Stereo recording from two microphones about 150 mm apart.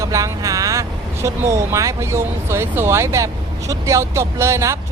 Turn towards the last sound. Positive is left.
turn(degrees=-20)  # may be behind; listen again after turning